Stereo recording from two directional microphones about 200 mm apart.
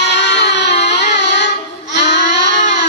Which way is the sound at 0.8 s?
60° left (ahead or behind).